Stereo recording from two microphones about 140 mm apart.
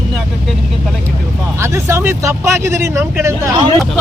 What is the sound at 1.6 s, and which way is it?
Speech, 20° right (ahead or behind).